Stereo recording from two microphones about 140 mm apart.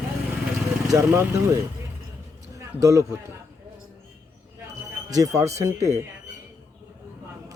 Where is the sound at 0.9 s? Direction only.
20° right (ahead or behind).